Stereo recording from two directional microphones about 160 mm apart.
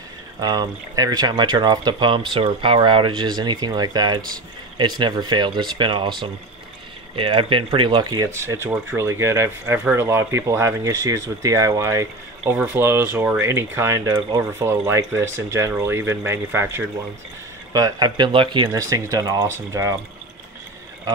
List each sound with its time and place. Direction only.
0.4 s speech: 25° right (ahead or behind)
7.2 s speech: 35° right (ahead or behind)